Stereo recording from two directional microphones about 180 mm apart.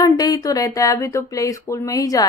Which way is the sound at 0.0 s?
20° left (ahead or behind).